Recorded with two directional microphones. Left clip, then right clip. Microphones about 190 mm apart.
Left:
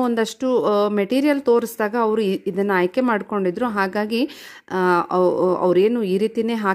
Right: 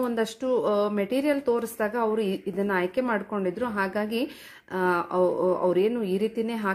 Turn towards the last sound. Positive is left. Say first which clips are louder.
# left 7 dB
turn(degrees=55)  # may be behind; listen again after turning